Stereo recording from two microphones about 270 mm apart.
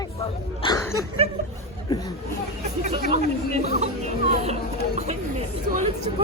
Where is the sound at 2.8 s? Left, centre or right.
Right.